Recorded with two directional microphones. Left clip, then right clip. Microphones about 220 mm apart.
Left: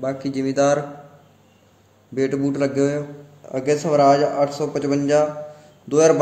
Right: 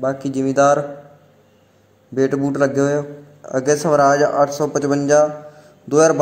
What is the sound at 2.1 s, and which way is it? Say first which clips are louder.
A man's voice: right 3 dB; 10° right (ahead or behind).